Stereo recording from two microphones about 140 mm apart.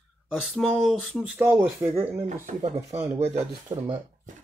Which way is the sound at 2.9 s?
50° right (ahead or behind).